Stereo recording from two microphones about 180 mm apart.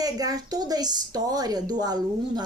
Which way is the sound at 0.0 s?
20° right (ahead or behind).